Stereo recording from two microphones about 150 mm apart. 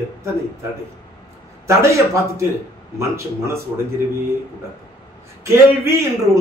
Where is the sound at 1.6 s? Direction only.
20° right (ahead or behind).